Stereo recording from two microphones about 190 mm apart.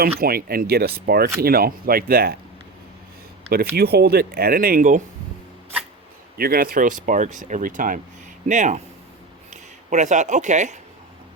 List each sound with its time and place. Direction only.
0.2 s speech: 50° right (ahead or behind)
3.5 s speech: 55° right (ahead or behind)
6.3 s speech: 50° right (ahead or behind)